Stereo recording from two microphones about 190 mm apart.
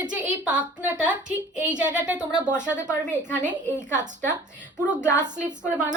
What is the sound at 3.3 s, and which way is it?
Speech, 40° right (ahead or behind).